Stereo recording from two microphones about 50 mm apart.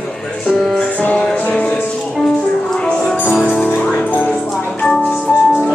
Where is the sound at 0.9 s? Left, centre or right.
Left.